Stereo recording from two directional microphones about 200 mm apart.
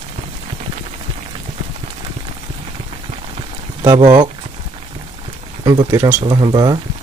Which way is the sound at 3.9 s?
20° right (ahead or behind).